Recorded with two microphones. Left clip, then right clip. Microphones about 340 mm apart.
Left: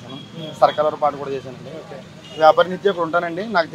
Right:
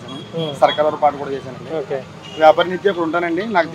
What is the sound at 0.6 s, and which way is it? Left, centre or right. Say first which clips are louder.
Speech: right 1 dB; left.